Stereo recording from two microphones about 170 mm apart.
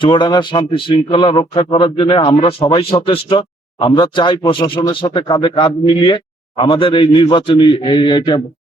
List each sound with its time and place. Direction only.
0.0 s a man's voice: 30° left (ahead or behind)